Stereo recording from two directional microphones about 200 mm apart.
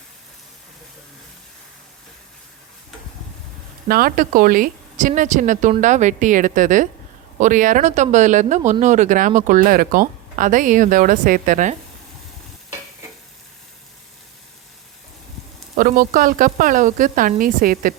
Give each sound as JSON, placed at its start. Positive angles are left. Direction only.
{"t": 3.8, "sound": "speech", "side_deg": -45}
{"t": 15.7, "sound": "a woman's voice", "side_deg": -45}